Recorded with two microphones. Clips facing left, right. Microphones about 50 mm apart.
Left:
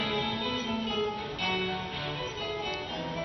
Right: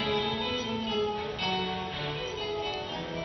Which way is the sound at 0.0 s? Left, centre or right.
Centre.